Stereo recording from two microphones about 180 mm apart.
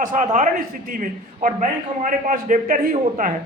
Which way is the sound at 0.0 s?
45° right (ahead or behind).